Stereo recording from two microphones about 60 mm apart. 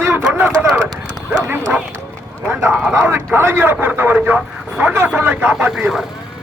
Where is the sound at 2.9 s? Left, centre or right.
Right.